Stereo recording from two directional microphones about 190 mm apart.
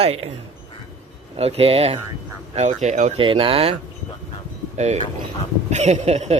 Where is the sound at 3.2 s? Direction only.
30° right (ahead or behind).